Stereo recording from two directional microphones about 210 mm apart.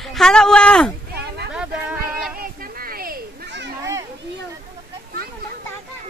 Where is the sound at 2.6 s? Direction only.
45° right (ahead or behind).